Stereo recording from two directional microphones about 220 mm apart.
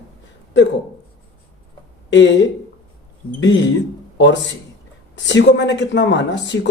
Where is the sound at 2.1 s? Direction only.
55° left (ahead or behind).